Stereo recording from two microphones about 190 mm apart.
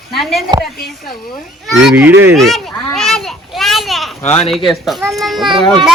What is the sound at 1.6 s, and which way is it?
Speech, centre (ahead or behind).